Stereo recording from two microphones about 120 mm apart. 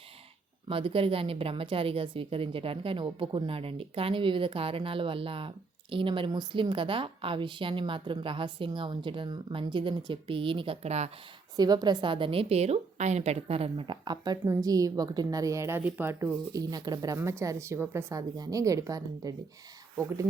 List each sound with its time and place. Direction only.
0.7 s a woman's voice: 50° right (ahead or behind)
10.8 s speech: 65° right (ahead or behind)
11.5 s a woman's voice: 35° right (ahead or behind); by 16.3 s 15° right (ahead or behind)
16.5 s a woman's voice: 30° right (ahead or behind)